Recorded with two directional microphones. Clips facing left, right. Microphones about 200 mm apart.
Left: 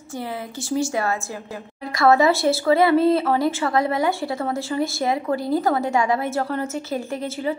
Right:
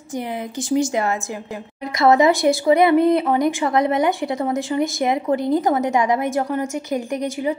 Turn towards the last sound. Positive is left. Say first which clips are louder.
# right 3 dB
turn(degrees=-15)  # may be behind; listen again after turning